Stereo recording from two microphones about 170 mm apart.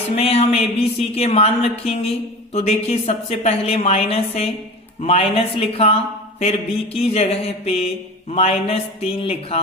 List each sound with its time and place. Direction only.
0.2 s speech: 35° left (ahead or behind)